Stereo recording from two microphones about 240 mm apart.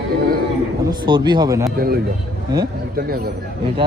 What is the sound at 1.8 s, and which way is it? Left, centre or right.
Speech, right.